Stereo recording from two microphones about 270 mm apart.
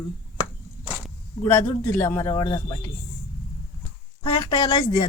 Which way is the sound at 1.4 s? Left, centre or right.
Centre.